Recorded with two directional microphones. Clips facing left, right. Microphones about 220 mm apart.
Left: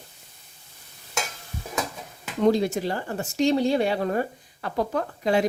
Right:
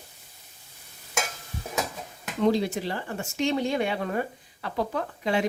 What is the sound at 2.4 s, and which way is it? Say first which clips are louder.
Speech: left 3 dB; 45° left (ahead or behind).